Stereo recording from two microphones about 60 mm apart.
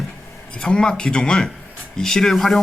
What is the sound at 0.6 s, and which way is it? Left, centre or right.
Speech, centre.